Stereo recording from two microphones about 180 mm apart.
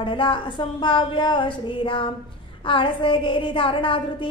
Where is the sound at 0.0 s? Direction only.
25° left (ahead or behind).